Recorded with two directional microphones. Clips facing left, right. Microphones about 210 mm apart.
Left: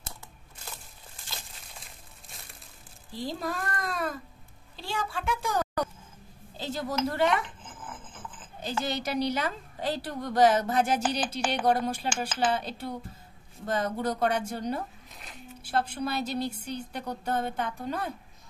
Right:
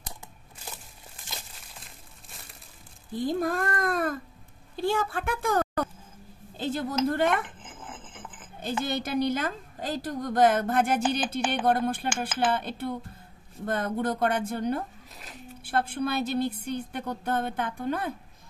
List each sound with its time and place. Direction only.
1.7 s crumpling: centre (ahead or behind)
3.1 s a woman's voice: 50° right (ahead or behind)
7.6 s dog: 25° right (ahead or behind)
8.1 s a sound: 20° right (ahead or behind)
8.8 s a woman's voice: 55° right (ahead or behind)
15.1 s a sound: centre (ahead or behind)
15.6 s a woman's voice: 55° right (ahead or behind)